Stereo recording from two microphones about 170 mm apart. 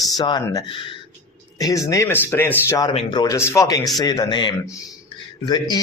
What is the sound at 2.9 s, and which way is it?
Speech, 30° left (ahead or behind).